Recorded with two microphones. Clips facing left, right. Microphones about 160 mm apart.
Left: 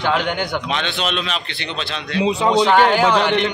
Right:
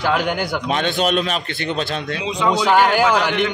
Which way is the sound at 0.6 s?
45° right (ahead or behind).